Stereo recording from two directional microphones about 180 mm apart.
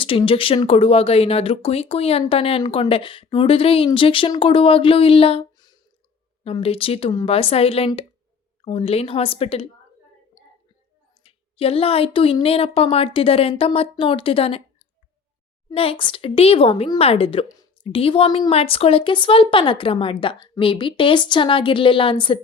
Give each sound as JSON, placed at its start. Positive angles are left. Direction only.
{"t": 0.0, "sound": "speech", "side_deg": 30}
{"t": 11.2, "sound": "speech", "side_deg": 30}
{"t": 15.7, "sound": "a woman's voice", "side_deg": 30}